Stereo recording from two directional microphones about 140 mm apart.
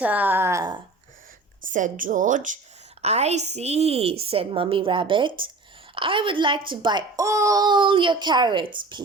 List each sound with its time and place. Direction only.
0.0 s speech: 10° right (ahead or behind)
1.6 s a woman's voice: 70° right (ahead or behind)
3.0 s a woman's voice: 50° right (ahead or behind); by 9.0 s 35° right (ahead or behind)